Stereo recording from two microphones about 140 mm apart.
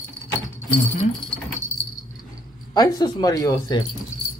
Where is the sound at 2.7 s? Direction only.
30° left (ahead or behind).